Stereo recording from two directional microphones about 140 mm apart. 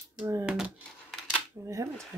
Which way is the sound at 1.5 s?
20° right (ahead or behind).